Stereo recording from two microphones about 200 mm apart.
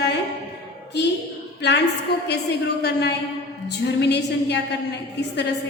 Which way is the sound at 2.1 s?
55° left (ahead or behind).